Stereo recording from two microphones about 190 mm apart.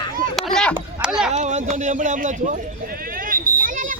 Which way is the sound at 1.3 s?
40° right (ahead or behind).